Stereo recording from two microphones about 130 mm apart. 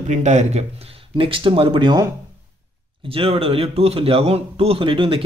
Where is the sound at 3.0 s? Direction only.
45° right (ahead or behind).